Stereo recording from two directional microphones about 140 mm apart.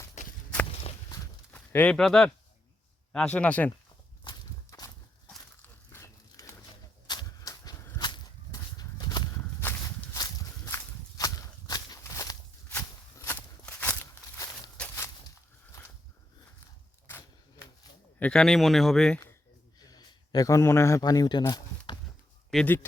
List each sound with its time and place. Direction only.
0.2 s walk: 55° left (ahead or behind)
0.7 s walk: 45° left (ahead or behind)
1.5 s speech: 10° left (ahead or behind)
4.2 s walk: 30° left (ahead or behind)
5.6 s dog: 20° left (ahead or behind)
7.1 s a sound: 30° left (ahead or behind)
8.8 s horse: 30° left (ahead or behind)
9.6 s walk: 20° left (ahead or behind)
14.8 s walk: 5° left (ahead or behind)
17.1 s a sound: 15° left (ahead or behind)
18.2 s speech: 5° left (ahead or behind)
19.8 s speech: 25° left (ahead or behind)
21.4 s a sound: 30° left (ahead or behind)
22.5 s speech: 15° left (ahead or behind)